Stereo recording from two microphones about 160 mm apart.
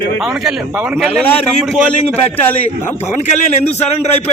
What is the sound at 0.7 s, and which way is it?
Speech, 15° right (ahead or behind).